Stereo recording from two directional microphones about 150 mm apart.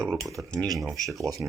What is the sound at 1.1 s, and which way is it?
Speech, 20° right (ahead or behind).